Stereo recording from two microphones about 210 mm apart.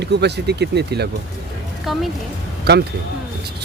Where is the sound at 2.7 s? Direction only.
50° right (ahead or behind).